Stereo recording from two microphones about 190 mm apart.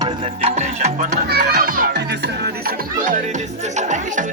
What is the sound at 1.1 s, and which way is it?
Music, 55° right (ahead or behind).